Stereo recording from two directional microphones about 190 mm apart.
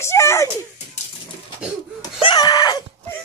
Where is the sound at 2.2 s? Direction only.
25° left (ahead or behind).